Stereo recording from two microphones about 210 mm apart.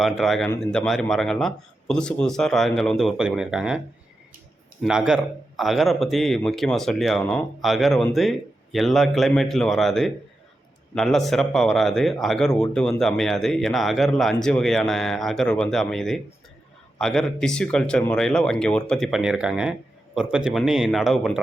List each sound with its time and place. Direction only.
0.0 s speech: centre (ahead or behind)
4.8 s speech: 5° right (ahead or behind)